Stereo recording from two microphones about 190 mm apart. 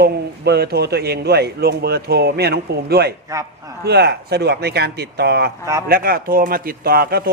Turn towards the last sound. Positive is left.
turn(degrees=-55)  # may be behind; listen again after turning